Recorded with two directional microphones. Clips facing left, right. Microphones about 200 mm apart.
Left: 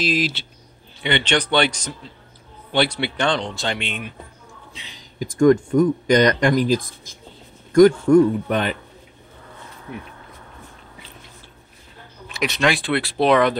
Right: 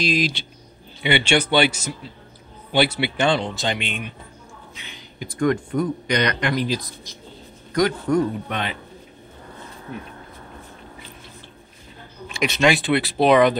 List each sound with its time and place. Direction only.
0.0 s speech: 5° left (ahead or behind)
1.0 s a man's voice: 10° right (ahead or behind)
5.2 s speech: 45° left (ahead or behind)
12.3 s speech: centre (ahead or behind)